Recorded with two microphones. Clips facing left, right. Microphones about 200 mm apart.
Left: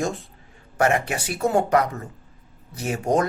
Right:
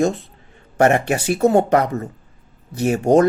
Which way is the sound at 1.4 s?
25° right (ahead or behind).